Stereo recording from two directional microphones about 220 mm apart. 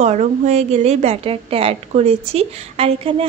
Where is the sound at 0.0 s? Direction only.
30° right (ahead or behind).